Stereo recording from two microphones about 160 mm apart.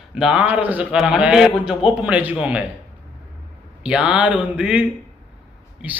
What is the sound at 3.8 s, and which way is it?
A man's voice, 5° right (ahead or behind).